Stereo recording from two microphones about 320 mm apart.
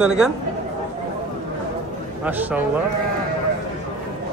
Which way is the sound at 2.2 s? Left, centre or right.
Centre.